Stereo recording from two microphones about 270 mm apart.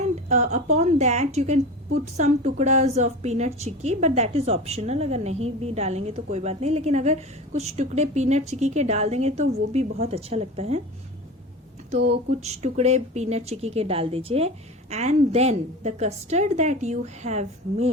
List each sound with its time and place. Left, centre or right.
0.3 s speech: right
12.3 s speech: right